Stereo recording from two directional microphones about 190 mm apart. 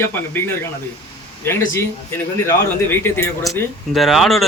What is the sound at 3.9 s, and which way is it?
Speech, centre (ahead or behind).